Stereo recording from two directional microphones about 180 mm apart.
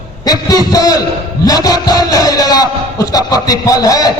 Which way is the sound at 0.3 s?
20° left (ahead or behind).